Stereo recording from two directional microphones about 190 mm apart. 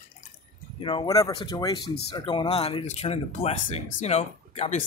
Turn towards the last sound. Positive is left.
turn(degrees=35)  # may be behind; listen again after turning